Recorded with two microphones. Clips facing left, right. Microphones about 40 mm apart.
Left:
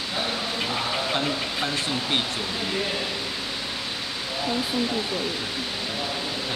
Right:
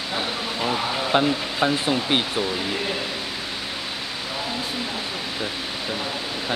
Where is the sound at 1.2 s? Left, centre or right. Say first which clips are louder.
Right 5 dB; right.